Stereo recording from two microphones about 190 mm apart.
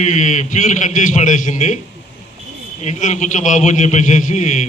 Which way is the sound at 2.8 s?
40° left (ahead or behind).